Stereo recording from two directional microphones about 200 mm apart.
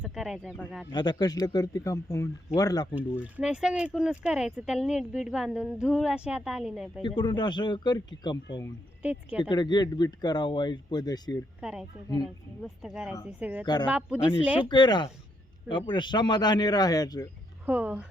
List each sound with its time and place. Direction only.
0.0 s speech: centre (ahead or behind)
0.9 s speech: 20° left (ahead or behind)
2.9 s speech: 5° right (ahead or behind)
7.0 s speech: 25° left (ahead or behind)
9.0 s speech: 5° right (ahead or behind)
9.4 s speech: 20° left (ahead or behind)
11.6 s speech: centre (ahead or behind)
14.7 s speech: 20° left (ahead or behind)
17.7 s speech: 5° right (ahead or behind)